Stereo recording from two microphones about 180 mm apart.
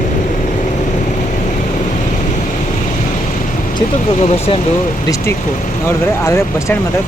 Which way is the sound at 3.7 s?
40° left (ahead or behind).